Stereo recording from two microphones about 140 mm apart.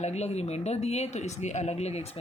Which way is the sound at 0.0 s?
50° left (ahead or behind).